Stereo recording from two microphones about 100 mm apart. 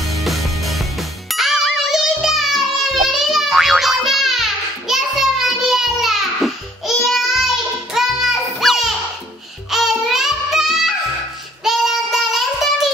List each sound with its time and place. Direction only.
0.1 s music: centre (ahead or behind)
11.6 s child singing: 5° right (ahead or behind)